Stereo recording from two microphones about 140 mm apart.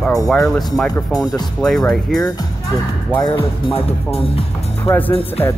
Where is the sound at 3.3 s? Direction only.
40° left (ahead or behind).